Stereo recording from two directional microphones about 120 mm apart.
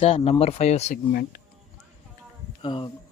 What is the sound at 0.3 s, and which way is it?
Speech, 60° left (ahead or behind).